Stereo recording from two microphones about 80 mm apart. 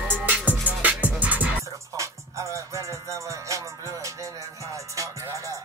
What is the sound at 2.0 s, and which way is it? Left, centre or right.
Music, right.